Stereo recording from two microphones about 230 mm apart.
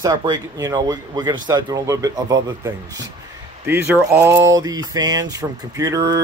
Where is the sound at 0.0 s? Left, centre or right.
Centre.